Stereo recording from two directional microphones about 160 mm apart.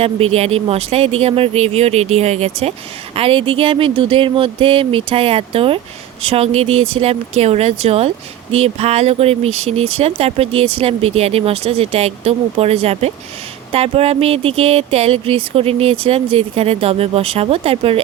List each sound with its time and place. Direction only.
0.0 s speech: 40° right (ahead or behind)